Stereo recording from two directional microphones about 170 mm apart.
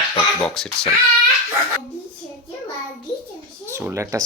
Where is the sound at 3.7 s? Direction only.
15° right (ahead or behind).